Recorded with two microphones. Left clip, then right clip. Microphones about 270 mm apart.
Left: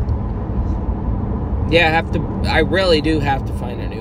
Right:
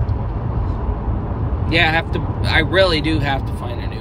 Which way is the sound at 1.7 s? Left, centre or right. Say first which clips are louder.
Left 2 dB; centre.